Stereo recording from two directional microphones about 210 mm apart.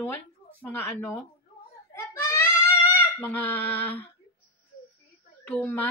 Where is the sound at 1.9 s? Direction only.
15° left (ahead or behind).